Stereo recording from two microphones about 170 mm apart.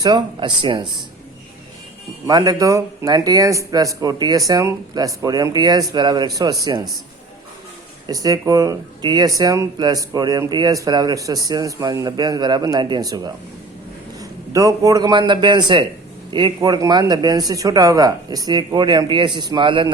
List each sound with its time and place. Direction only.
0.0 s speech: 25° right (ahead or behind)
2.2 s speech: 20° right (ahead or behind)
8.0 s a man's voice: 20° right (ahead or behind)